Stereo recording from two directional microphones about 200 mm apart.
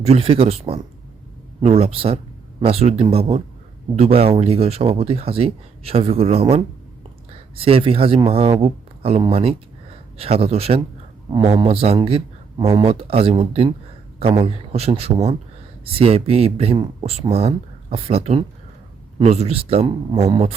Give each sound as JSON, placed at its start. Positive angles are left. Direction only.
{"t": 0.0, "sound": "speech", "side_deg": -30}